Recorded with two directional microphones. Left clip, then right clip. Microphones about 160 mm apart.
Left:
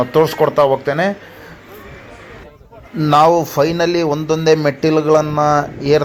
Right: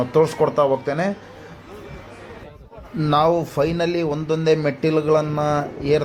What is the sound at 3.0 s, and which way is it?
A man's voice, 20° left (ahead or behind).